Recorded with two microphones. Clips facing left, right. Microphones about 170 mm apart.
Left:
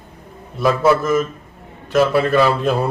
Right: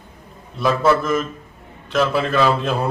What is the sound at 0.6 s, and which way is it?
A man's voice, 5° left (ahead or behind).